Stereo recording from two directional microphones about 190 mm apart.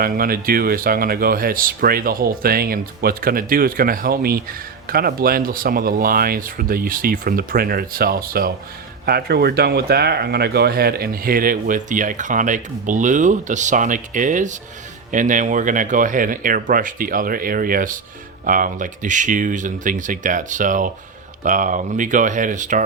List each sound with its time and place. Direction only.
0.0 s speech: 50° right (ahead or behind)